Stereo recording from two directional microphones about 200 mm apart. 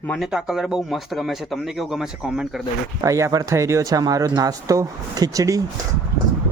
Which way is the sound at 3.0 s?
15° right (ahead or behind).